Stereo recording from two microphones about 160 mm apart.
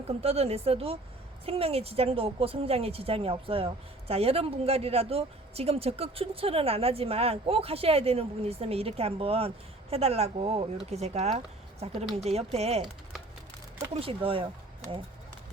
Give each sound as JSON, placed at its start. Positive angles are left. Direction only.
{"t": 0.2, "sound": "a woman's voice", "side_deg": -40}
{"t": 13.9, "sound": "a woman's voice", "side_deg": -35}